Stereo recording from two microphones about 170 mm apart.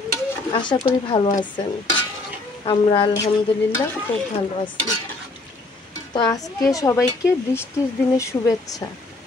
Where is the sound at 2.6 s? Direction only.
30° left (ahead or behind).